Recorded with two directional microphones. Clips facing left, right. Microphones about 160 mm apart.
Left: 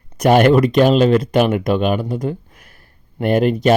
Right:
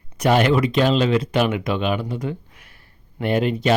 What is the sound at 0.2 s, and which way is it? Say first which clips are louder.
Speech: left 6 dB; 50° left (ahead or behind).